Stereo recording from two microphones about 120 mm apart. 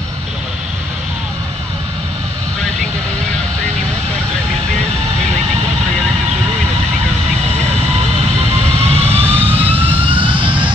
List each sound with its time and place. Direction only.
8.7 s vehicle: 55° right (ahead or behind)